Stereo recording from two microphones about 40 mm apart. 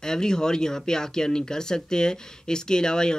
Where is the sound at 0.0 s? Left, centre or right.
Centre.